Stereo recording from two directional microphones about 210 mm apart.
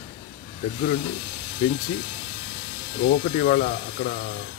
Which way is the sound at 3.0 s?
40° left (ahead or behind).